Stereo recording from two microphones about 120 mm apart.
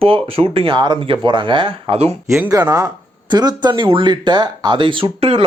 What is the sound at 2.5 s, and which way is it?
Speech, 30° right (ahead or behind).